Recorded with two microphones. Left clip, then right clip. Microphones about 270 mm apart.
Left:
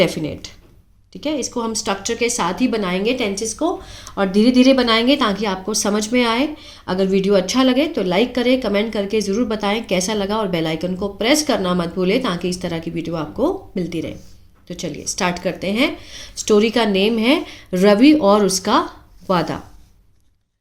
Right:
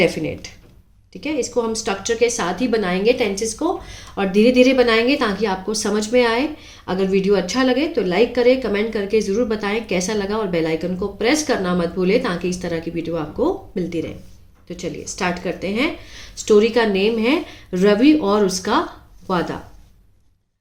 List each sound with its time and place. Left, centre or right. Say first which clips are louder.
0.0 s a woman's voice: even; centre